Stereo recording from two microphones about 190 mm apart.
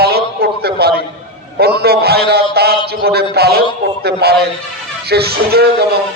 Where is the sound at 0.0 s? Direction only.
55° right (ahead or behind).